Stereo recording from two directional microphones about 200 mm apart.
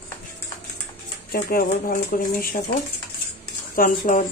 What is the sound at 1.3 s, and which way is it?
Speech, 45° left (ahead or behind).